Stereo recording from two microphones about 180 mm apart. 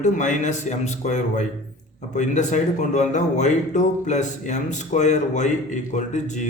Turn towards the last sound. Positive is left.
turn(degrees=40)  # may be behind; listen again after turning